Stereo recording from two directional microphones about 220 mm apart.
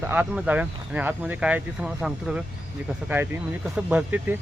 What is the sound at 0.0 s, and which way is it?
Speech, 10° right (ahead or behind).